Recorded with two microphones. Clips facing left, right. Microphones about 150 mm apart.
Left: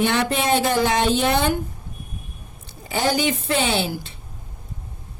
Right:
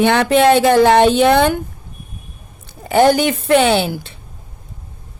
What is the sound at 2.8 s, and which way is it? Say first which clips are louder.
A woman's voice: right 9 dB; 60° right (ahead or behind).